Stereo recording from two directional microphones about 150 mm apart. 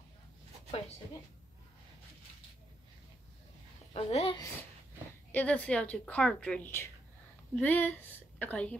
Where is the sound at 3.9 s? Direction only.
40° left (ahead or behind).